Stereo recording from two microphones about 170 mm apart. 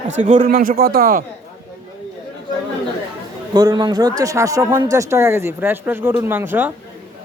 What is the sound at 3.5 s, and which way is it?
A man's voice, 25° right (ahead or behind).